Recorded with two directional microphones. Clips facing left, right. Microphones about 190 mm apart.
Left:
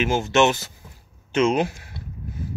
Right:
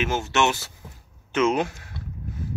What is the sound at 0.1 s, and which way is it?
Speech, 15° left (ahead or behind).